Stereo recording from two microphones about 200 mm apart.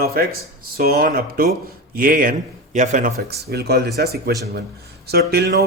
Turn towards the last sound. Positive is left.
turn(degrees=-55)  # may be behind; listen again after turning